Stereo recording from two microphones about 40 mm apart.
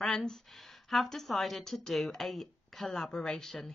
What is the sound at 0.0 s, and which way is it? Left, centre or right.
A woman's voice, centre.